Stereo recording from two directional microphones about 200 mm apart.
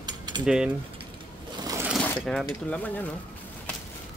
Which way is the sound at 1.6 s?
15° right (ahead or behind).